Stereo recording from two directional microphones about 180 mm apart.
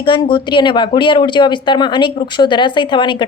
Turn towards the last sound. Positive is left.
turn(degrees=25)  # may be behind; listen again after turning